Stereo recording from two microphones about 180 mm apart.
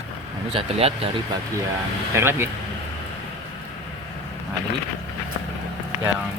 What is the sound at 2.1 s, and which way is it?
Speech, 15° right (ahead or behind).